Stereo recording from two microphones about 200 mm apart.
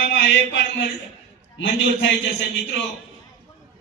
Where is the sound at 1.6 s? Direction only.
70° left (ahead or behind).